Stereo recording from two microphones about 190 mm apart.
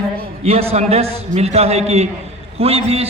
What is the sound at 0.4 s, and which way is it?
A man's voice, 30° right (ahead or behind).